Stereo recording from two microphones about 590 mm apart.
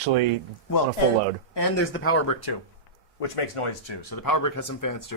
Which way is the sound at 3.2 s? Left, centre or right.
Left.